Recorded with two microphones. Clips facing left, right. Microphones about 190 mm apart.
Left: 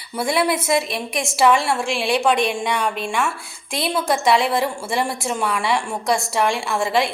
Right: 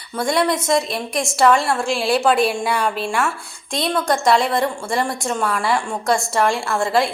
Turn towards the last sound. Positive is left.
turn(degrees=0)  # may be behind; listen again after turning